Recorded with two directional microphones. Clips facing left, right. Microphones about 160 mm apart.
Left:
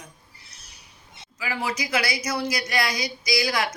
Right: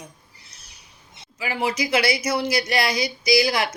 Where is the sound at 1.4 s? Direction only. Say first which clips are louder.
Right 4 dB; 25° right (ahead or behind).